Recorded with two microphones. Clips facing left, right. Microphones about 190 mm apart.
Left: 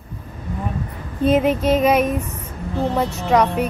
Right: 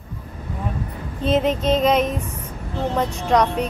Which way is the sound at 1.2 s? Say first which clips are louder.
Left 3 dB; 10° left (ahead or behind).